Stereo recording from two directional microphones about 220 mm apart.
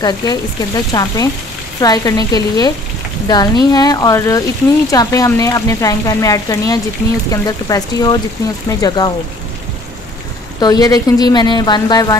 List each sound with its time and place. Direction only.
0.0 s speech: 15° left (ahead or behind)
10.6 s speech: 15° left (ahead or behind)